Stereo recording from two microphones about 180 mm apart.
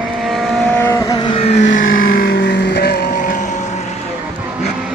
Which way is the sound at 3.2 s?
45° left (ahead or behind).